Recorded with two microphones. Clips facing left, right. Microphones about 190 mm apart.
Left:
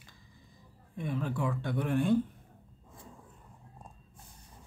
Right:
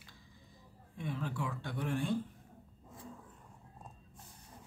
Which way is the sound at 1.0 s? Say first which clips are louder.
Left 5 dB; 50° left (ahead or behind).